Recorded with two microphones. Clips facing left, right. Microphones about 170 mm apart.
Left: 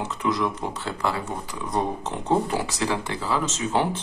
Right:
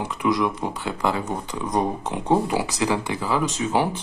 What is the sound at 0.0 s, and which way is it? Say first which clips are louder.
Speech: right 3 dB; 10° right (ahead or behind).